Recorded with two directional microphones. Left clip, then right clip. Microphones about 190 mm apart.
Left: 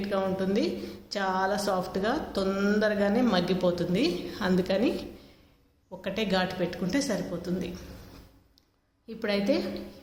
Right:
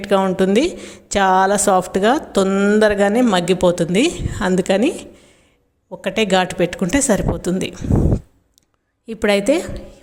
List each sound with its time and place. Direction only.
0.0 s a woman's voice: 50° right (ahead or behind)
9.0 s a woman's voice: 50° right (ahead or behind)